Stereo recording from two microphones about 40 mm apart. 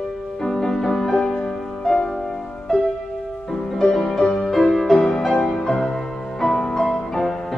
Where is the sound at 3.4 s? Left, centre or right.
Centre.